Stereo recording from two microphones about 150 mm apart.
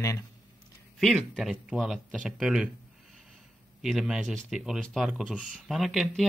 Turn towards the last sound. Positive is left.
turn(degrees=0)  # may be behind; listen again after turning